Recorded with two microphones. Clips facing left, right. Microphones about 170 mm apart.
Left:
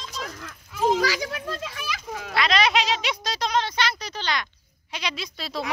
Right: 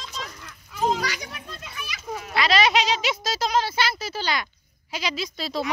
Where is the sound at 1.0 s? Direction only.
90° left.